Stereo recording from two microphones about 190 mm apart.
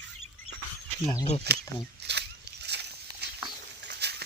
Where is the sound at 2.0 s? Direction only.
60° right (ahead or behind).